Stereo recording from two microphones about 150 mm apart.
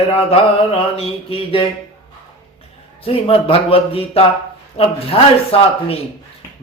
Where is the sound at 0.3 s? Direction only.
40° left (ahead or behind).